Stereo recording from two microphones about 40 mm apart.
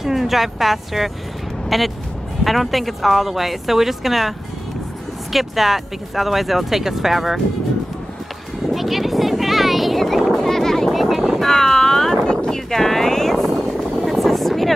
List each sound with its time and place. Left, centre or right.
0.0 s speech: centre
5.3 s speech: centre
8.7 s vehicle: centre
10.9 s vehicle: centre
11.4 s vehicle: centre
12.3 s a sound: left
12.5 s a sound: centre
14.0 s vehicle: centre